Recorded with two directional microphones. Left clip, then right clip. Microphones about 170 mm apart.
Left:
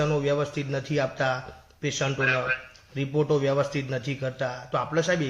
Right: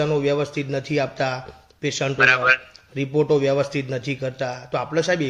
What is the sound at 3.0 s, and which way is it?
A man's voice, 40° right (ahead or behind).